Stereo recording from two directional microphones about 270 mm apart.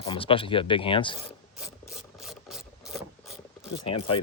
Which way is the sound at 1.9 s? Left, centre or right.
Centre.